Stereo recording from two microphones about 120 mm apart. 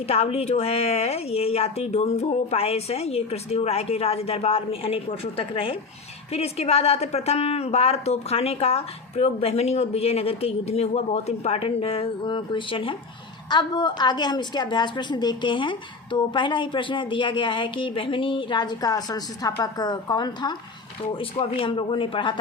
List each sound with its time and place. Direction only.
0.0 s a woman's voice: 60° left (ahead or behind)
6.3 s a woman's voice: 60° left (ahead or behind); by 20.6 s 35° left (ahead or behind)
21.1 s speech: 50° left (ahead or behind)